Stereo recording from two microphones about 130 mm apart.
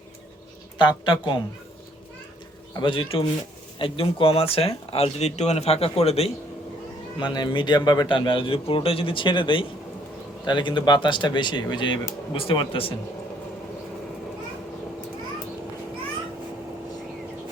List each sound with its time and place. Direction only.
0.8 s speech: 35° left (ahead or behind)
2.7 s speech: 40° left (ahead or behind)
7.2 s speech: 35° left (ahead or behind)